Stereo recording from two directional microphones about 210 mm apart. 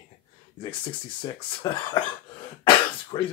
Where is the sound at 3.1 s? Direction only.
20° left (ahead or behind).